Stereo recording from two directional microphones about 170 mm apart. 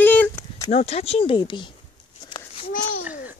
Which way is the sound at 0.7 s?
40° left (ahead or behind).